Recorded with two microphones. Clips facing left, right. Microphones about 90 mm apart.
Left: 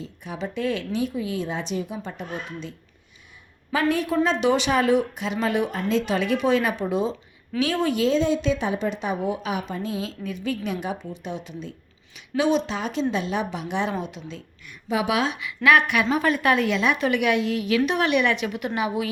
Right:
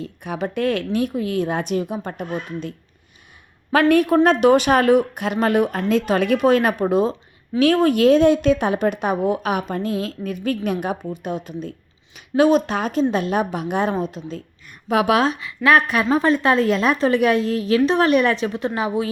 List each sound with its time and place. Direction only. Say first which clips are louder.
0.0 s a woman's voice: right 6 dB; 60° right (ahead or behind); by 19.1 s 35° right (ahead or behind)